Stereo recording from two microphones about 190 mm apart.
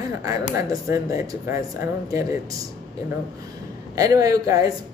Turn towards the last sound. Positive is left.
turn(degrees=-20)  # may be behind; listen again after turning